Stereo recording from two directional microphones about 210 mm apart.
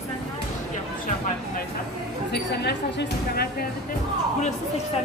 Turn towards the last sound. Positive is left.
turn(degrees=45)  # may be behind; listen again after turning